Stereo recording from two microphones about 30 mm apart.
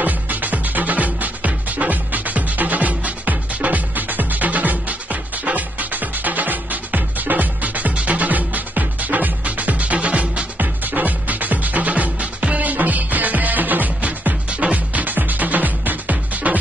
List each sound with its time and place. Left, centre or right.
0.0 s music: right
7.9 s music: right
8.2 s music: right
9.9 s music: right
10.6 s music: right
11.9 s music: right
12.6 s music: right
14.9 s music: right
16.5 s music: right